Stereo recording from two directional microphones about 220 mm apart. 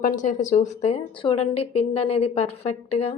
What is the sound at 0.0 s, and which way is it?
A woman's voice, 35° left (ahead or behind).